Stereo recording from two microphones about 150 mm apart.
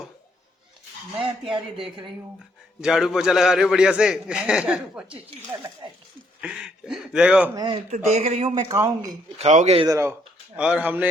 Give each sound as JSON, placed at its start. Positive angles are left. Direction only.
{"t": 2.8, "sound": "a man's voice", "side_deg": -5}
{"t": 6.4, "sound": "a man's voice", "side_deg": -5}
{"t": 7.5, "sound": "speech", "side_deg": -25}
{"t": 7.9, "sound": "speech", "side_deg": -50}
{"t": 8.7, "sound": "speech", "side_deg": -20}
{"t": 9.4, "sound": "speech", "side_deg": -50}
{"t": 9.7, "sound": "speech", "side_deg": -25}
{"t": 10.6, "sound": "speech", "side_deg": -10}